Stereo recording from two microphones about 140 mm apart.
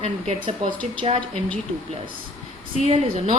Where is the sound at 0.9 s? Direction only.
40° right (ahead or behind).